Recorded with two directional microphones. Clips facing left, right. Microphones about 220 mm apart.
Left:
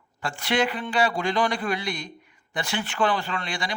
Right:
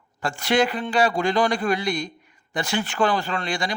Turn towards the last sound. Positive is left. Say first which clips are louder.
# right 4 dB
turn(degrees=-45)  # may be behind; listen again after turning